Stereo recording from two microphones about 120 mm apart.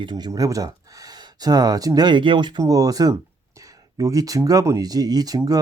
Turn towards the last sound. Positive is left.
turn(degrees=-35)  # may be behind; listen again after turning